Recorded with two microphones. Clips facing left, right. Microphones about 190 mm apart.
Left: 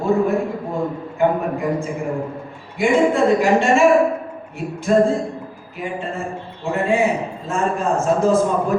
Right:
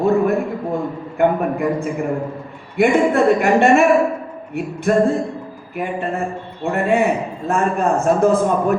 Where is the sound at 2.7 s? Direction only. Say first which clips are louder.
Right 2 dB; 60° right (ahead or behind).